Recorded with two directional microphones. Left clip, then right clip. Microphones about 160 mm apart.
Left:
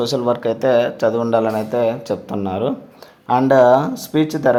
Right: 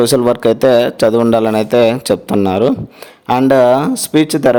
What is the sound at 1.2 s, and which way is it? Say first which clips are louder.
A man's voice: right 5 dB; 60° right (ahead or behind).